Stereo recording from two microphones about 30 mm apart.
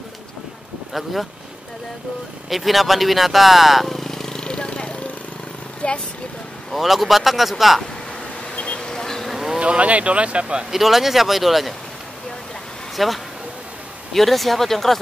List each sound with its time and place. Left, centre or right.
2.5 s speech: centre
3.9 s vehicle: centre; by 4.9 s left
5.8 s speech: left
6.7 s speech: centre
8.5 s a sound: left
9.6 s speech: right
10.7 s speech: centre
12.9 s speech: centre